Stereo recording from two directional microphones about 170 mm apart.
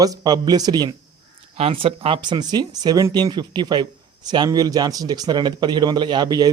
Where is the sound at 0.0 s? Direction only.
20° right (ahead or behind).